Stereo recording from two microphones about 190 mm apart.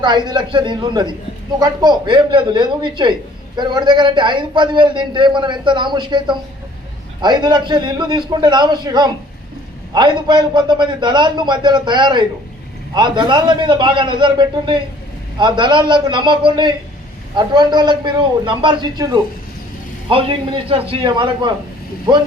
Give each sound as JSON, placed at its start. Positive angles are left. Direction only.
{"t": 0.3, "sound": "a man's voice", "side_deg": -25}